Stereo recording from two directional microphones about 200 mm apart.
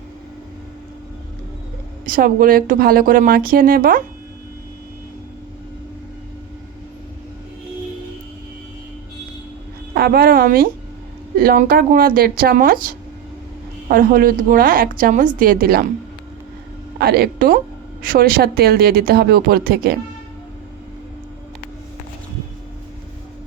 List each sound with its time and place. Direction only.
2.0 s speech: 45° right (ahead or behind)
9.9 s speech: 50° right (ahead or behind)
13.8 s speech: 45° right (ahead or behind)
17.0 s speech: 50° right (ahead or behind)